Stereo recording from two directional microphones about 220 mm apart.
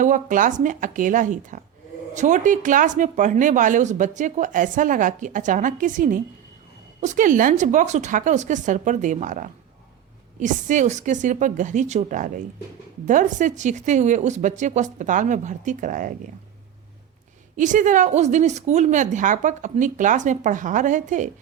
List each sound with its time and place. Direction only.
0.0 s speech: 35° right (ahead or behind)
17.6 s speech: 35° right (ahead or behind)